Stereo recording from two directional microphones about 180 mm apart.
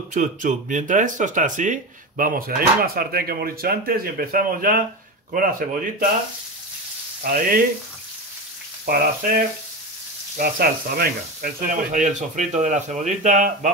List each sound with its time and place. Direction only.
0.1 s speech: 45° right (ahead or behind)
8.8 s frying: 55° right (ahead or behind)
10.3 s speech: 55° right (ahead or behind)